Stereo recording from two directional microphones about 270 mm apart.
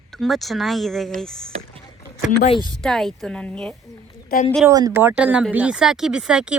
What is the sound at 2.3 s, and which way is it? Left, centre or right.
Speech, left.